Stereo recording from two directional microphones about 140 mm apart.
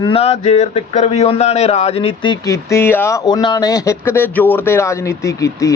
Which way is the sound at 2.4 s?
20° left (ahead or behind).